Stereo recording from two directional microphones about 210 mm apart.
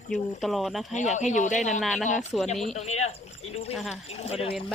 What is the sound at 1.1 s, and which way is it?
Speech, 35° left (ahead or behind).